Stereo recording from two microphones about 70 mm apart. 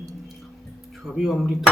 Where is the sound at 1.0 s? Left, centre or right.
Centre.